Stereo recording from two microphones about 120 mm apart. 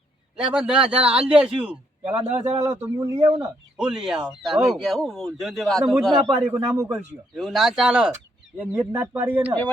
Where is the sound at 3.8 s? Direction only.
5° right (ahead or behind).